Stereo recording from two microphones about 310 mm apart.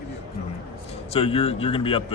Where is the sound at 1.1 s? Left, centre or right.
Centre.